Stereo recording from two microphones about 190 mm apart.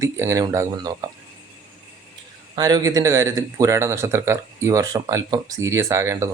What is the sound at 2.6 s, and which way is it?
Speech, 20° right (ahead or behind).